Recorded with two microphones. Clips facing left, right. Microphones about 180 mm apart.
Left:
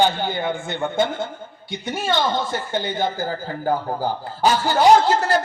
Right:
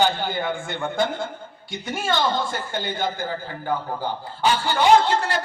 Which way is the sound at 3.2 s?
40° left (ahead or behind).